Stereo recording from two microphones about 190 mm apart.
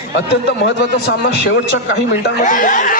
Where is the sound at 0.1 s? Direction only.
65° left (ahead or behind).